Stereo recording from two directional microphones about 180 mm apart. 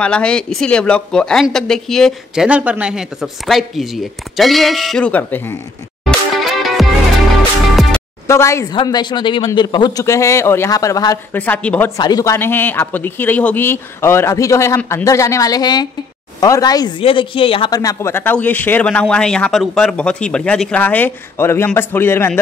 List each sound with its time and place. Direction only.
0.0 s speech: 5° left (ahead or behind)
6.0 s music: centre (ahead or behind)
8.3 s a woman's voice: 15° left (ahead or behind)
12.0 s a woman's voice: 20° left (ahead or behind)